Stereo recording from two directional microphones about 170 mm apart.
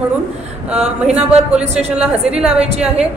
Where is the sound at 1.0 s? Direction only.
5° right (ahead or behind).